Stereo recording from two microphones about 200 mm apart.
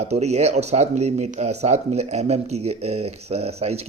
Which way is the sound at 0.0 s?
35° right (ahead or behind).